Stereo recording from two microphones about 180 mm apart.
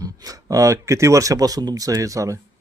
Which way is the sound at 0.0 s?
20° right (ahead or behind).